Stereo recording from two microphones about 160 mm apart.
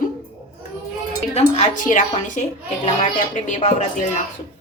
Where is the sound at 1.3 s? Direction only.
50° left (ahead or behind).